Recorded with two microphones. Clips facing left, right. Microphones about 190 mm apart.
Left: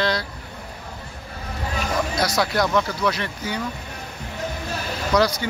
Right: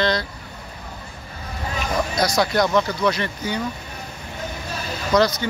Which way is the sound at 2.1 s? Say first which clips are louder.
Right 4 dB; 5° left (ahead or behind).